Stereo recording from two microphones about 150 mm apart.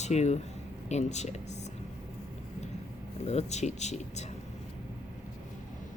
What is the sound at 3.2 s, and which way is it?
Speech, 45° left (ahead or behind).